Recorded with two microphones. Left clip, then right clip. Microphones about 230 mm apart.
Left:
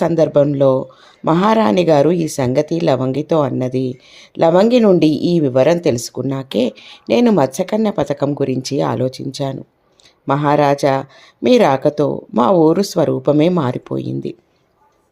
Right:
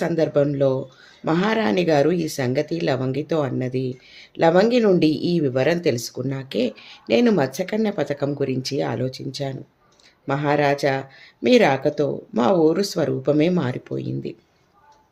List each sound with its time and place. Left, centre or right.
0.0 s speech: left